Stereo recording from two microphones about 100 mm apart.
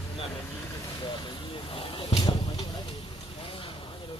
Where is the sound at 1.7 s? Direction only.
65° left (ahead or behind).